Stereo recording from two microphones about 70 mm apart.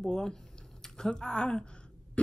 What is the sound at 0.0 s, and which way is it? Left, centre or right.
Speech, centre.